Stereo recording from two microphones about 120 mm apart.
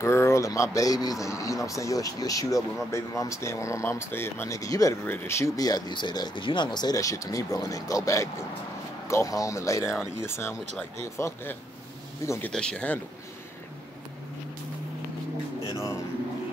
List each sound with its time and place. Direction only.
0.0 s speech: 20° left (ahead or behind)
5.0 s speech: 20° left (ahead or behind)
15.7 s speech: 25° left (ahead or behind)